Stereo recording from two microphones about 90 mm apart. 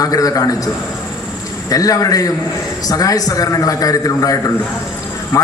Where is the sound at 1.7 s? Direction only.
40° left (ahead or behind).